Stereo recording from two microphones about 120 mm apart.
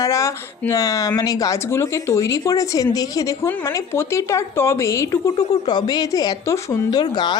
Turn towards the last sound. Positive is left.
turn(degrees=35)  # may be behind; listen again after turning